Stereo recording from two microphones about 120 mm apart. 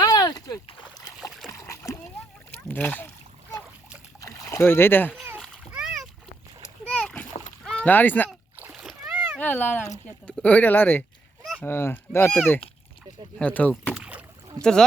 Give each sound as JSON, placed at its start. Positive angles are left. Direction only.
{"t": 0.0, "sound": "a sound", "side_deg": 35}
{"t": 1.5, "sound": "splash", "side_deg": 25}
{"t": 2.6, "sound": "speech", "side_deg": 15}
{"t": 4.2, "sound": "a sound", "side_deg": 25}
{"t": 5.4, "sound": "splash", "side_deg": 0}
{"t": 6.8, "sound": "splash", "side_deg": 10}
{"t": 7.6, "sound": "rowboat", "side_deg": 5}
{"t": 7.9, "sound": "speech", "side_deg": 15}
{"t": 8.7, "sound": "splash", "side_deg": -5}
{"t": 9.4, "sound": "speech", "side_deg": 15}
{"t": 13.4, "sound": "speech", "side_deg": 10}
{"t": 13.9, "sound": "rowboat", "side_deg": -10}
{"t": 14.6, "sound": "speech", "side_deg": 5}